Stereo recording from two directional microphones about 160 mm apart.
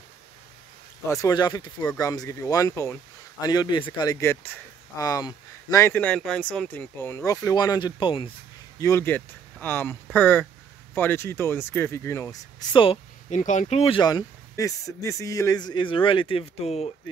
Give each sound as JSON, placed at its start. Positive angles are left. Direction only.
{"t": 1.2, "sound": "speech", "side_deg": 25}
{"t": 8.7, "sound": "speech", "side_deg": 20}
{"t": 13.4, "sound": "speech", "side_deg": 50}
{"t": 14.0, "sound": "speech", "side_deg": 25}